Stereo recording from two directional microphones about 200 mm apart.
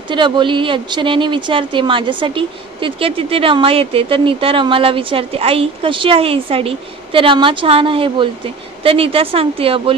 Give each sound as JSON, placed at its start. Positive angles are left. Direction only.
{"t": 0.1, "sound": "speech", "side_deg": -25}